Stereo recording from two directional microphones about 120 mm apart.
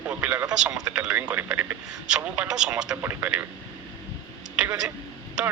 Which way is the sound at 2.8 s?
20° right (ahead or behind).